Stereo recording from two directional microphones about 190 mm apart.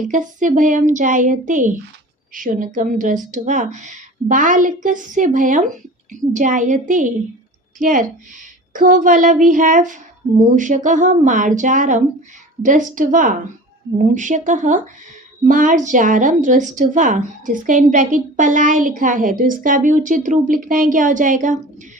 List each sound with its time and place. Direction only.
0.1 s a woman's voice: 40° right (ahead or behind)